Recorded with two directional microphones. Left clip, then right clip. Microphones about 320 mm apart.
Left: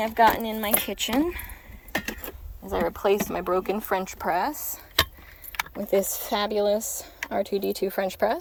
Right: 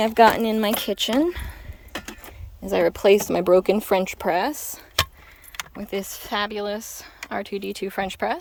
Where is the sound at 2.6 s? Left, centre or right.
Right.